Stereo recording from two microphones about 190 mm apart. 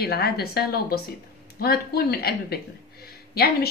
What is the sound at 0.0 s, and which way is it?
A woman's voice, 55° left (ahead or behind).